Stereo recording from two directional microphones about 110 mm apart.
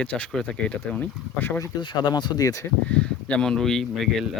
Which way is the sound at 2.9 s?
10° left (ahead or behind).